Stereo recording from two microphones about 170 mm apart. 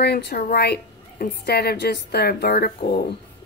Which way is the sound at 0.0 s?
70° left (ahead or behind).